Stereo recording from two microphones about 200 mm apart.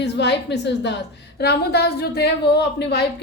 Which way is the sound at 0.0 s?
60° left (ahead or behind).